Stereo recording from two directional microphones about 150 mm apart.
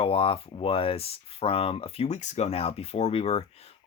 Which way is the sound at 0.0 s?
35° left (ahead or behind).